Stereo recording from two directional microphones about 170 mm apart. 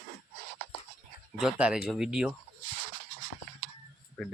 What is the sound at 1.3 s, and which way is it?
Speech, 5° right (ahead or behind).